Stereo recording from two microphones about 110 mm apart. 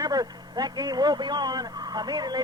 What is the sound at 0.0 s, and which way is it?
A man's voice, 35° right (ahead or behind).